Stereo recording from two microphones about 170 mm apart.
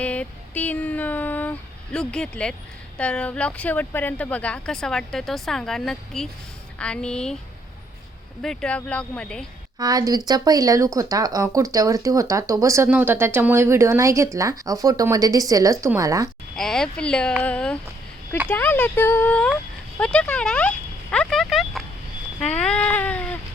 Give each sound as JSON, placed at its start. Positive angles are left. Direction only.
{"t": 0.0, "sound": "a sound", "side_deg": 10}
{"t": 3.0, "sound": "speech", "side_deg": 5}
{"t": 8.4, "sound": "speech", "side_deg": 5}
{"t": 9.7, "sound": "speech", "side_deg": -20}
{"t": 16.6, "sound": "speech", "side_deg": 5}
{"t": 20.0, "sound": "a sound", "side_deg": 5}